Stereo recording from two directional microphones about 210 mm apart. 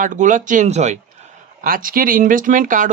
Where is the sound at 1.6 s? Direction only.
45° right (ahead or behind).